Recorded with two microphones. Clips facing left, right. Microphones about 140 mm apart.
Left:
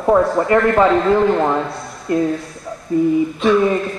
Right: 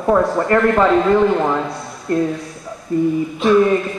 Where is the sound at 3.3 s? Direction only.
Centre (ahead or behind).